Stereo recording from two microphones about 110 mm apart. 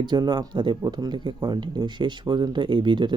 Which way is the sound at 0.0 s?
40° right (ahead or behind).